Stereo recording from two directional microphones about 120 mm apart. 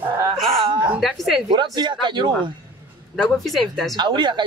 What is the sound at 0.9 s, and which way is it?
Speech, centre (ahead or behind).